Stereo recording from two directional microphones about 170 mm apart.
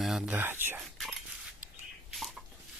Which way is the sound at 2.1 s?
Centre (ahead or behind).